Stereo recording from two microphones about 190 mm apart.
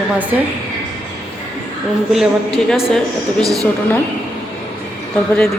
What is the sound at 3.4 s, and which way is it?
Speech, 20° right (ahead or behind).